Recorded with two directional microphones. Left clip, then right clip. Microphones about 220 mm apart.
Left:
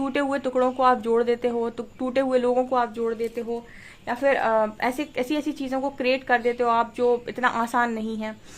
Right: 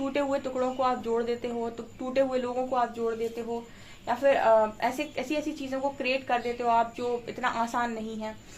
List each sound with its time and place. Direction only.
0.0 s a woman's voice: 40° left (ahead or behind)
4.0 s a woman's voice: 45° left (ahead or behind)